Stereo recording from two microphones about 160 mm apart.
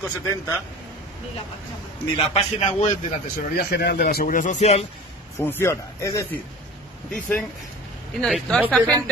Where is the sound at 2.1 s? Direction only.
40° left (ahead or behind).